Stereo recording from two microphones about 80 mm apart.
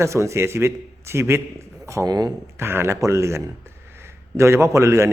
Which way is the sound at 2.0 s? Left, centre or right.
Right.